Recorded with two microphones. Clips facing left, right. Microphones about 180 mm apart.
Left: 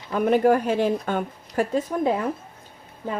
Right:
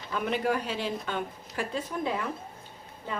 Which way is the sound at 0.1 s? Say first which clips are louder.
Left 10 dB; 45° left (ahead or behind).